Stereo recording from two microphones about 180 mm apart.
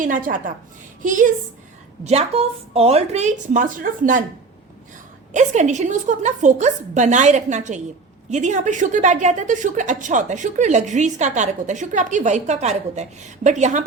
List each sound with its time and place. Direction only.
0.0 s a woman's voice: 45° right (ahead or behind)
2.0 s a woman's voice: 35° right (ahead or behind)
5.3 s a woman's voice: 40° right (ahead or behind)